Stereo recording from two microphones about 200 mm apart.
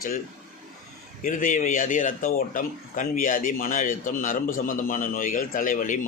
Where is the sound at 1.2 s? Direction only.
40° left (ahead or behind).